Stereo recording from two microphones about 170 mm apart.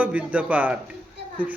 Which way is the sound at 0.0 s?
10° right (ahead or behind).